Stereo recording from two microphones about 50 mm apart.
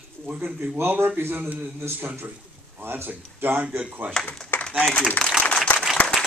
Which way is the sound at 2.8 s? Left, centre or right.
Right.